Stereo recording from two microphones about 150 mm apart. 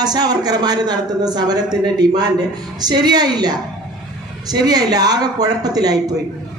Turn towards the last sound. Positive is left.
turn(degrees=-25)  # may be behind; listen again after turning